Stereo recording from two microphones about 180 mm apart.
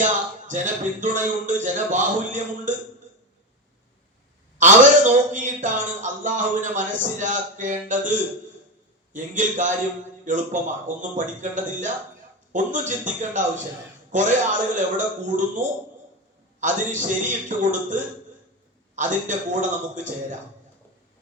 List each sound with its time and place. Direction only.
0.0 s a man's voice: 45° right (ahead or behind)
4.5 s a man's voice: 45° right (ahead or behind)
9.1 s a man's voice: 45° right (ahead or behind)